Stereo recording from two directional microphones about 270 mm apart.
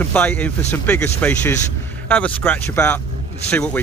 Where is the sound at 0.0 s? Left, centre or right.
Centre.